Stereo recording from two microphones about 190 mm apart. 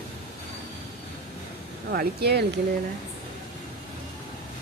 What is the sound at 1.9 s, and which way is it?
Speech, 55° right (ahead or behind).